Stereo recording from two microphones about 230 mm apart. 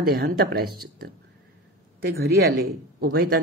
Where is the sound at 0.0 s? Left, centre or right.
Right.